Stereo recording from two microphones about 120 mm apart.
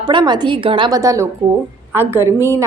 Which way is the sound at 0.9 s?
30° right (ahead or behind).